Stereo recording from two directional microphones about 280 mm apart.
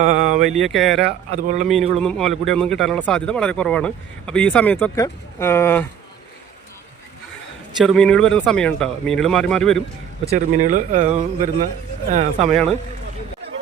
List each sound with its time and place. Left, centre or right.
0.0 s a sound: right
0.4 s speech: centre
1.3 s speech: right
2.0 s speech: centre
7.8 s speech: centre
10.2 s speech: right